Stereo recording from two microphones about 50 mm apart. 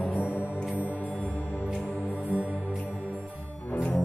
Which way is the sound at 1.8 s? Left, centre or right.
Centre.